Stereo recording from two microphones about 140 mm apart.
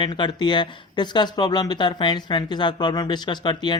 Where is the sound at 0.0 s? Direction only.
35° left (ahead or behind).